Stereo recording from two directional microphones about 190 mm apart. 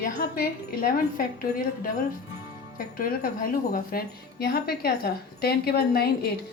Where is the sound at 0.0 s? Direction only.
50° left (ahead or behind).